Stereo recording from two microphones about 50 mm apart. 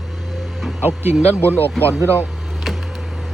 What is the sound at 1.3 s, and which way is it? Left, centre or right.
Speech, left.